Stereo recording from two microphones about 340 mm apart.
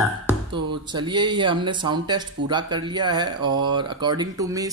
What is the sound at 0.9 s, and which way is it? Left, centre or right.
Speech, centre.